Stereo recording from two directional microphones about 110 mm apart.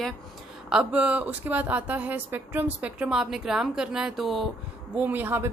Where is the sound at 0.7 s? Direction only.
10° right (ahead or behind).